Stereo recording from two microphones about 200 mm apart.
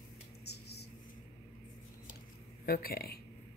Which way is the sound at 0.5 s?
55° left (ahead or behind).